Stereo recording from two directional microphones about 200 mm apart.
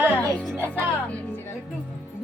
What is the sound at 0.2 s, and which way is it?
Music, 5° left (ahead or behind).